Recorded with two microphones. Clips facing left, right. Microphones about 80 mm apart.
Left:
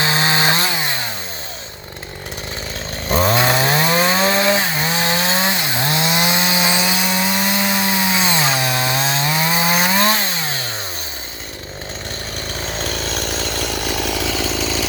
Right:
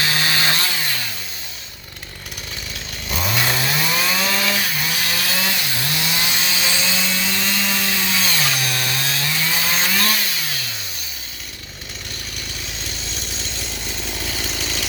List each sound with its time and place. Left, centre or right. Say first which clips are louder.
0.0 s chainsaw: left 4 dB; left
3.1 s chainsaw: left 7 dB; left
12.6 s chainsaw: left 9 dB; left